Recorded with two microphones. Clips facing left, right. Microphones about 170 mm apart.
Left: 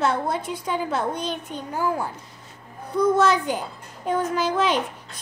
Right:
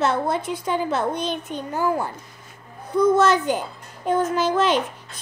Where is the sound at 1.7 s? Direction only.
Centre (ahead or behind).